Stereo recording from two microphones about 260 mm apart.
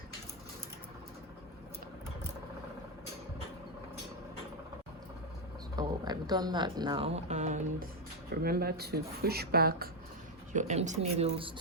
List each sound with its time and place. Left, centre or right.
5.7 s speech: centre